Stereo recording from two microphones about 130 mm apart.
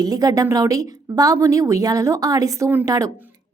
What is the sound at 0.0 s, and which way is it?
A woman's voice, 30° right (ahead or behind).